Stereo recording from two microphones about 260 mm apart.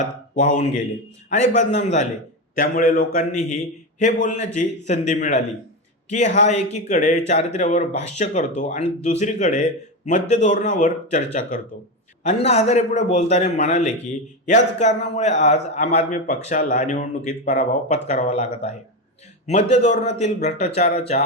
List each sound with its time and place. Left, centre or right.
0.0 s a man's voice: left